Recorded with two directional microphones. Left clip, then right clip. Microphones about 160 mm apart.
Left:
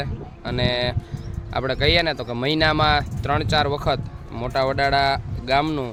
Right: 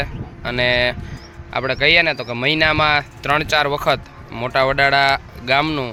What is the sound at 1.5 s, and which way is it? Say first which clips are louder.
Speech: right 5 dB; 20° left (ahead or behind).